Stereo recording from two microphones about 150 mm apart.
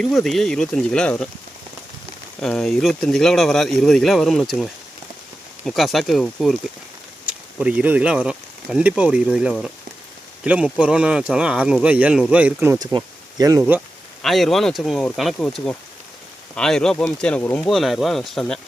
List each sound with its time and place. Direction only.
0.0 s speech: centre (ahead or behind)
2.4 s speech: centre (ahead or behind)
12.8 s speech: 25° right (ahead or behind)
14.2 s speech: centre (ahead or behind)